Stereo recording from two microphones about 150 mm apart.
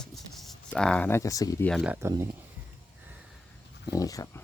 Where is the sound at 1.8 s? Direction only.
10° right (ahead or behind).